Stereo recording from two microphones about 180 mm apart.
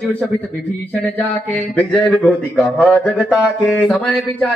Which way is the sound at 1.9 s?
5° left (ahead or behind).